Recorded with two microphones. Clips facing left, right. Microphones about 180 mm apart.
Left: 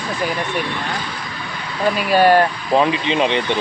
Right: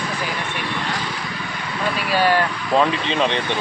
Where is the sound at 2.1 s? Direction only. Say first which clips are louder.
Left 6 dB; 45° left (ahead or behind).